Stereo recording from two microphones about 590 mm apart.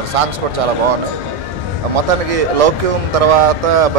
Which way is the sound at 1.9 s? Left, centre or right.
Right.